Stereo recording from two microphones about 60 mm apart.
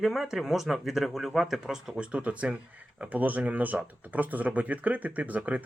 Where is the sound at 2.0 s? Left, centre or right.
Right.